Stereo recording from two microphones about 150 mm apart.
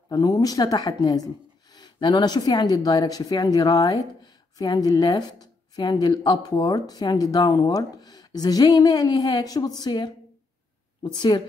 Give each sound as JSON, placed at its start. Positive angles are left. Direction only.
{"t": 0.1, "sound": "a woman's voice", "side_deg": 25}